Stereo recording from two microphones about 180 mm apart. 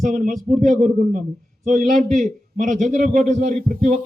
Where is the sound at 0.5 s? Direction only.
45° right (ahead or behind).